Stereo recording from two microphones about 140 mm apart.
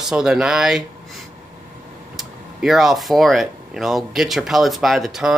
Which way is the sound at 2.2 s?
Centre (ahead or behind).